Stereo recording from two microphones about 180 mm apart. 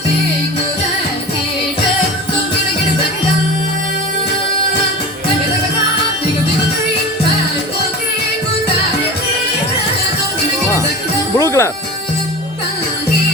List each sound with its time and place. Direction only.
11.3 s music: 15° left (ahead or behind)